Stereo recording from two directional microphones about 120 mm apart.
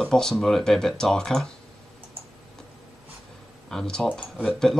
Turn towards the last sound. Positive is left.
turn(degrees=5)  # may be behind; listen again after turning